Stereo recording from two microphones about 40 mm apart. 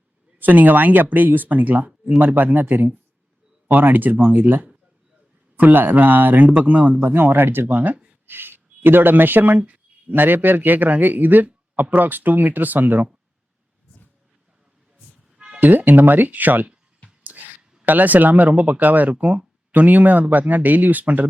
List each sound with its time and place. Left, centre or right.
0.3 s speech: right
7.0 s speech: right
9.6 s a sound: right
10.2 s speech: right
15.4 s music: centre
15.6 s speech: right
17.2 s a sound: right
17.6 s a sound: centre
17.8 s speech: right